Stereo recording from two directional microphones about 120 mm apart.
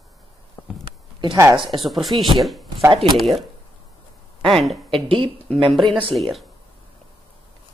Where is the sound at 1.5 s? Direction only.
45° right (ahead or behind).